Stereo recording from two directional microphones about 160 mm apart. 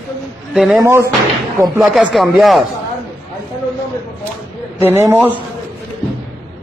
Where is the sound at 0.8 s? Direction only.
20° right (ahead or behind).